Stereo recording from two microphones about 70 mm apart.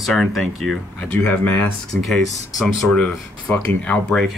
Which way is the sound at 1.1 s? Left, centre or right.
Left.